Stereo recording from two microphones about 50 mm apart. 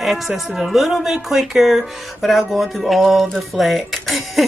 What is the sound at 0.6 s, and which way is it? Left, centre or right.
Speech, centre.